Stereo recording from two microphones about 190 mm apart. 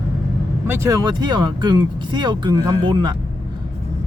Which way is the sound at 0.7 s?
15° right (ahead or behind).